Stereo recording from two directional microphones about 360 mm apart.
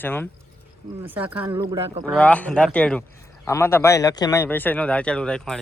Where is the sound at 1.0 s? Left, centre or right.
Centre.